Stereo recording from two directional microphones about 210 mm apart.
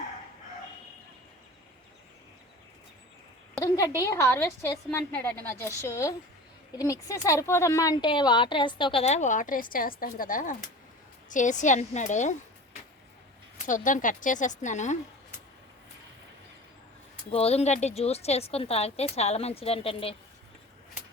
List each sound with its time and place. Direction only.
3.6 s a woman's voice: 15° left (ahead or behind); by 12.4 s 35° left (ahead or behind)
13.7 s a woman's voice: 35° left (ahead or behind)
17.3 s a woman's voice: 30° left (ahead or behind)